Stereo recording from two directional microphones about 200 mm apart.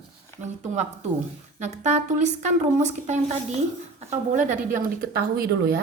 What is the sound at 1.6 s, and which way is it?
Speech, 35° right (ahead or behind).